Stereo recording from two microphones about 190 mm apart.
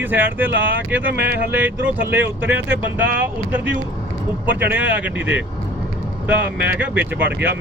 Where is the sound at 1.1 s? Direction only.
60° right (ahead or behind).